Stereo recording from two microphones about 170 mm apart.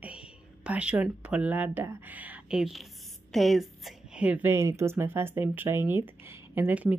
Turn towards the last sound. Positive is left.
turn(degrees=-10)  # may be behind; listen again after turning